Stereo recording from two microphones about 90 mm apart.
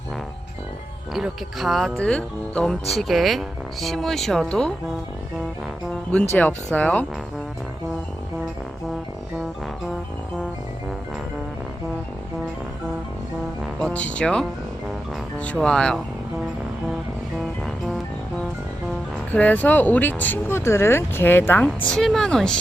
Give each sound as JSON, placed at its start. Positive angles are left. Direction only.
{"t": 1.1, "sound": "speech", "side_deg": 0}
{"t": 2.0, "sound": "speech", "side_deg": 10}
{"t": 6.1, "sound": "a woman's voice", "side_deg": 15}
{"t": 13.7, "sound": "speech", "side_deg": 10}
{"t": 15.6, "sound": "a woman's voice", "side_deg": 10}
{"t": 19.3, "sound": "a woman's voice", "side_deg": 20}